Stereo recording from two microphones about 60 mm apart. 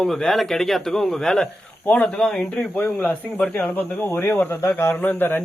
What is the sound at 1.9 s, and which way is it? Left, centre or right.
Speech, left.